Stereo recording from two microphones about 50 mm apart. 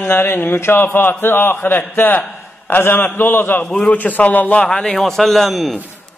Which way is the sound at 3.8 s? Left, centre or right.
Left.